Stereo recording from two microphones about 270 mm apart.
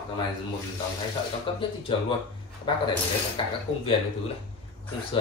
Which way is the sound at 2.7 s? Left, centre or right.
Centre.